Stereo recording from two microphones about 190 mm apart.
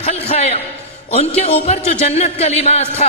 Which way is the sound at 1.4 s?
35° left (ahead or behind).